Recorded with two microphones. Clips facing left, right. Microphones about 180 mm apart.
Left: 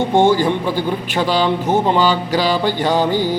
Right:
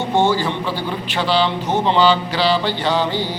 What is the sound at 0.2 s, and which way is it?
Mantra, 50° left (ahead or behind).